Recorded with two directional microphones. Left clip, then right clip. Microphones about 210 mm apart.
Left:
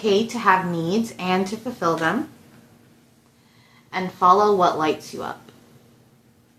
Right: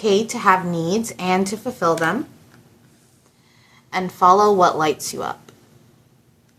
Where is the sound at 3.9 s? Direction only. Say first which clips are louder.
Right 2 dB; 15° right (ahead or behind).